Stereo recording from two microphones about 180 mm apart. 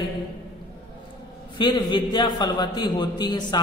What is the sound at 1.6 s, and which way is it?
A man's voice, 25° left (ahead or behind).